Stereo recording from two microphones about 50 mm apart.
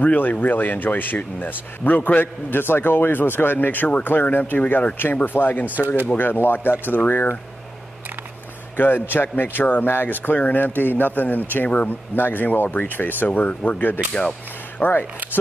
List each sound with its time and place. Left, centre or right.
0.0 s speech: left
2.5 s speech: left
8.7 s a man's voice: left
13.5 s speech: left